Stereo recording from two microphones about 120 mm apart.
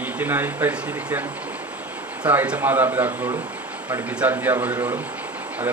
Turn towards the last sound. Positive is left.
turn(degrees=-15)  # may be behind; listen again after turning